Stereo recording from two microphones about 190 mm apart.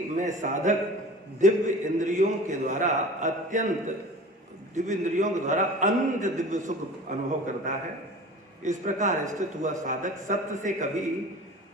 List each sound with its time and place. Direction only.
0.2 s a man's voice: 40° right (ahead or behind)